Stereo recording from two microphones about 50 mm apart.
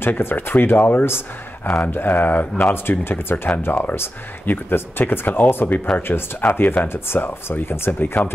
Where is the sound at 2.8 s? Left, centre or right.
Left.